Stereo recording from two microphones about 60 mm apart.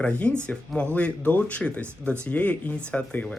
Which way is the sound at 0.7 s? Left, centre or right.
Centre.